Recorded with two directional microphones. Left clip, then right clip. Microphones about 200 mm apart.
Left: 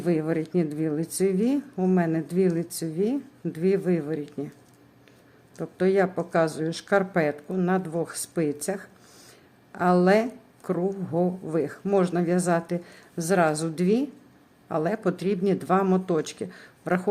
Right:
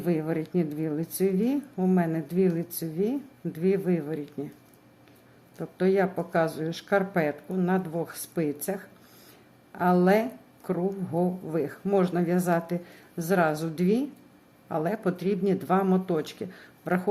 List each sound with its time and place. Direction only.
0.0 s a woman's voice: 15° left (ahead or behind)
5.5 s a woman's voice: 15° left (ahead or behind)